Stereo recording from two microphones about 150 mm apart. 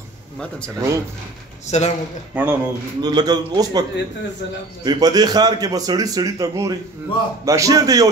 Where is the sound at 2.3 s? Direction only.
10° right (ahead or behind).